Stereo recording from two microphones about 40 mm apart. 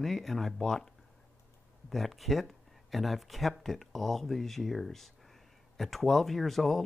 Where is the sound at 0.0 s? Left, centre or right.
Centre.